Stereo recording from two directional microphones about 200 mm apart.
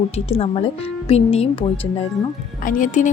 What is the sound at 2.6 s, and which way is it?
Speech, 40° left (ahead or behind).